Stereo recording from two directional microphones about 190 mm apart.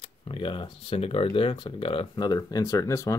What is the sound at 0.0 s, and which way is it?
Speech, 25° left (ahead or behind).